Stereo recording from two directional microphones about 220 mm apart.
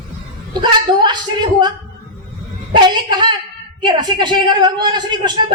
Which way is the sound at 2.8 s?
20° right (ahead or behind).